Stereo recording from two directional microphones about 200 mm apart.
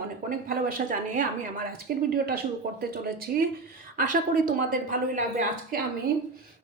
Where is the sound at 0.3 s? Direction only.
45° right (ahead or behind).